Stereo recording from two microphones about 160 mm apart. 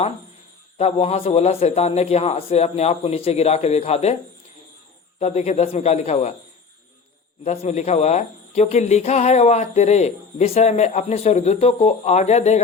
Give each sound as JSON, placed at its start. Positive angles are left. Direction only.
{"t": 0.8, "sound": "a man's voice", "side_deg": 40}
{"t": 5.2, "sound": "speech", "side_deg": 45}
{"t": 7.4, "sound": "speech", "side_deg": 40}